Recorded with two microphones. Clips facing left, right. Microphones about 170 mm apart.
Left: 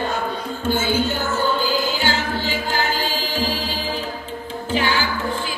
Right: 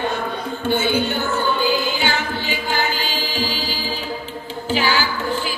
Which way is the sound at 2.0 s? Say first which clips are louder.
Even; 70° right (ahead or behind).